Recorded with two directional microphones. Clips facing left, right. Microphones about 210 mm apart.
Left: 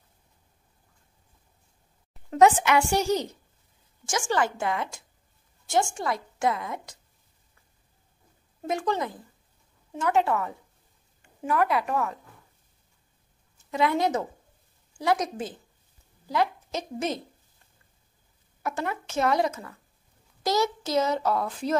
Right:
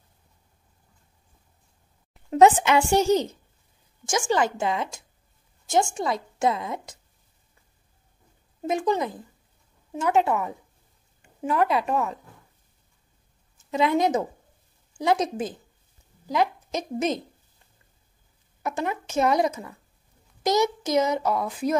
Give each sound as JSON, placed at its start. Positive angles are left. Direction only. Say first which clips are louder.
{"t": 2.3, "sound": "a woman's voice", "louder": "right 2 dB", "side_deg": -25}
{"t": 8.6, "sound": "a child's voice", "louder": "right 3 dB", "side_deg": -20}
{"t": 13.7, "sound": "a woman's voice", "louder": "right 3 dB", "side_deg": -20}
{"t": 18.6, "sound": "a child's voice", "louder": "right 2 dB", "side_deg": -20}